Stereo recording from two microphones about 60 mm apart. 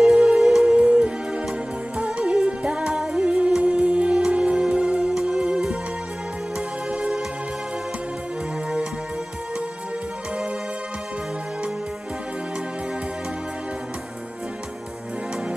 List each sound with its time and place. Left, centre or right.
0.1 s music: centre
0.7 s music: centre
6.9 s music: centre